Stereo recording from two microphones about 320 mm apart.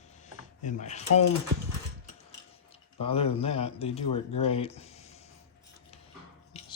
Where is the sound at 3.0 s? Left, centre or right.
Centre.